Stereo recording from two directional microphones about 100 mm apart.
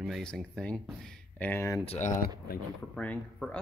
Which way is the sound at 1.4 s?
25° left (ahead or behind).